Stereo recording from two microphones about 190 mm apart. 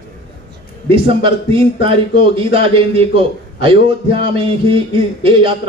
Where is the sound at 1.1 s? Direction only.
30° right (ahead or behind).